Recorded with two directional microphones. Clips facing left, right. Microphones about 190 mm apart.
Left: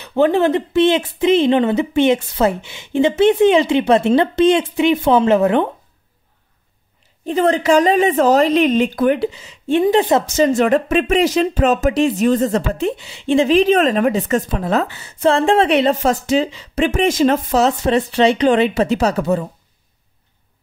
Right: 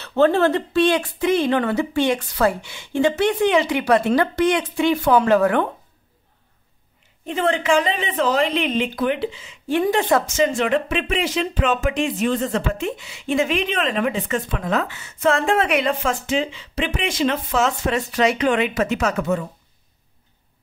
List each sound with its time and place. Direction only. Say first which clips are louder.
0.0 s speech: left 2 dB; 15° left (ahead or behind)
7.2 s speech: left 5 dB; 40° left (ahead or behind)
9.7 s speech: left 5 dB; 25° left (ahead or behind)
10.2 s speech: left 5 dB; 35° left (ahead or behind)